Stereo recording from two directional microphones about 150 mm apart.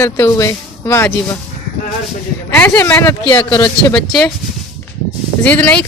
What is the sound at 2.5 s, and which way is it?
Speech, 15° left (ahead or behind).